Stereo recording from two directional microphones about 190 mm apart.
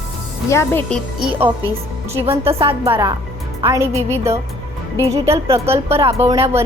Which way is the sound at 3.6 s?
20° right (ahead or behind).